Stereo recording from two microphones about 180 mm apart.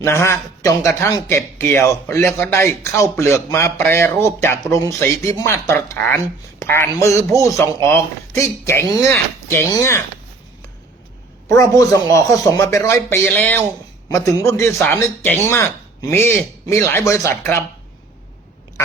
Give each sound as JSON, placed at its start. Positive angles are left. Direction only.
{"t": 0.0, "sound": "speech", "side_deg": 15}
{"t": 11.4, "sound": "speech", "side_deg": 15}